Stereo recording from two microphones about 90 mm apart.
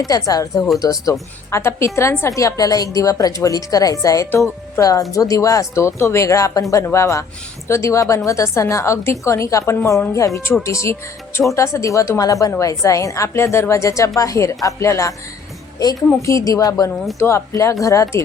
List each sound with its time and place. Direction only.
0.1 s a woman's voice: 40° left (ahead or behind)
16.2 s a woman's voice: 40° left (ahead or behind)
17.2 s a woman's voice: 30° left (ahead or behind)